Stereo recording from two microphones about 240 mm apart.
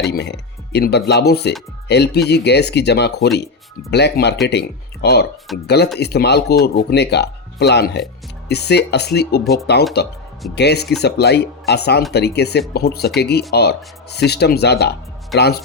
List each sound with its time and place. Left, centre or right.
0.1 s speech: left
9.4 s speech: centre
10.0 s speech: left